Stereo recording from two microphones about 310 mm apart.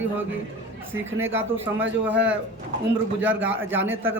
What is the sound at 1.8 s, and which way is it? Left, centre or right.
Speech, right.